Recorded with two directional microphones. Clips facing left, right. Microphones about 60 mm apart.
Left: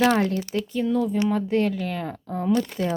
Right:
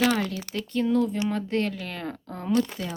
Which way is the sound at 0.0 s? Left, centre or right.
Left.